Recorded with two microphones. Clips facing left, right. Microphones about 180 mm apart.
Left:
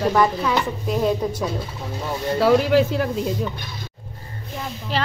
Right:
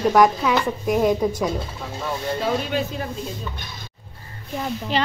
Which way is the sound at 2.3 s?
90° left.